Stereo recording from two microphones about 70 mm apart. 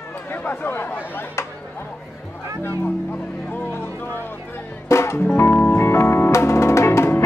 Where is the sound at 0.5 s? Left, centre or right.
Left.